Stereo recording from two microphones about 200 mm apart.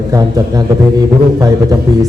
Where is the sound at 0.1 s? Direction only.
15° right (ahead or behind).